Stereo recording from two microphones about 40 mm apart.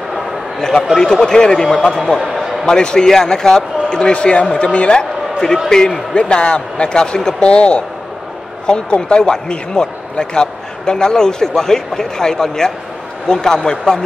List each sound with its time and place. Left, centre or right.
0.6 s a man's voice: centre
2.1 s a sound: centre
2.6 s a man's voice: left
4.1 s a man's voice: left